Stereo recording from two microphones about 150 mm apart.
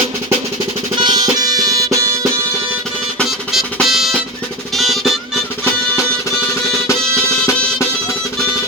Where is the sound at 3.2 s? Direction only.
Centre (ahead or behind).